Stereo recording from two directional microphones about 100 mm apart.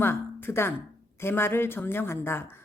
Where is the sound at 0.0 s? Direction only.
25° left (ahead or behind).